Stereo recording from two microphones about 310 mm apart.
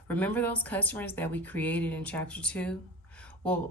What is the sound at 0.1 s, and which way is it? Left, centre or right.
Speech, centre.